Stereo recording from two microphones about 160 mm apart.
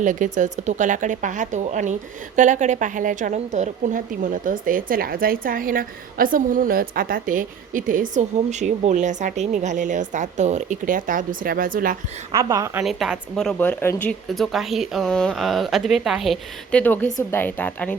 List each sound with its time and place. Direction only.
0.0 s speech: 50° right (ahead or behind)
12.3 s a woman's voice: 20° right (ahead or behind)
12.8 s speech: centre (ahead or behind)
16.8 s a woman's voice: 10° left (ahead or behind)